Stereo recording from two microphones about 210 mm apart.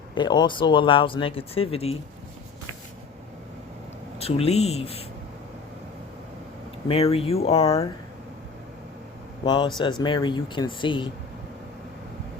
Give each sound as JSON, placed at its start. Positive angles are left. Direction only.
{"t": 0.1, "sound": "speech", "side_deg": 20}
{"t": 4.2, "sound": "speech", "side_deg": 30}
{"t": 6.8, "sound": "speech", "side_deg": 30}
{"t": 9.4, "sound": "speech", "side_deg": 20}